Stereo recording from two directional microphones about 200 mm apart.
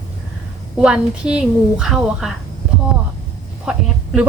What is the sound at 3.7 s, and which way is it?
Speech, 5° right (ahead or behind).